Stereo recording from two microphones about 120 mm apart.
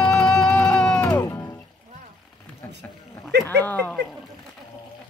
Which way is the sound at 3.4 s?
15° left (ahead or behind).